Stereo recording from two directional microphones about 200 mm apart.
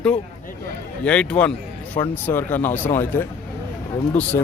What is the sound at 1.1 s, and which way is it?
Speech, 5° left (ahead or behind).